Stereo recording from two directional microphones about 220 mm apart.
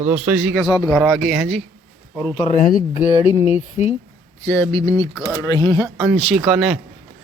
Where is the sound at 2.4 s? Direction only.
35° left (ahead or behind).